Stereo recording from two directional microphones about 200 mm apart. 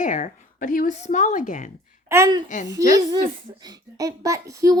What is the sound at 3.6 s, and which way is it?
A child's voice, 20° right (ahead or behind).